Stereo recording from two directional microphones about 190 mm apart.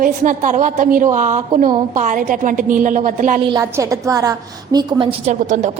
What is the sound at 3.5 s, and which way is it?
A woman's voice, 15° right (ahead or behind).